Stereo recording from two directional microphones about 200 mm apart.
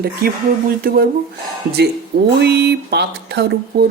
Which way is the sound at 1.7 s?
55° right (ahead or behind).